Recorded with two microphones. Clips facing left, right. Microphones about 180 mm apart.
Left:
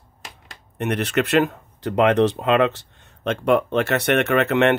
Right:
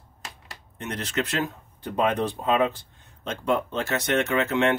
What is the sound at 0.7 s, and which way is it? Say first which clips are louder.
Speech: left 8 dB; 65° left (ahead or behind).